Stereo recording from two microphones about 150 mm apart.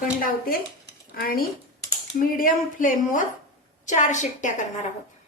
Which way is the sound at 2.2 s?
65° left (ahead or behind).